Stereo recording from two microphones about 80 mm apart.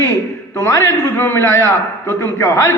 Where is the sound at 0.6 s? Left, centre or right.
Left.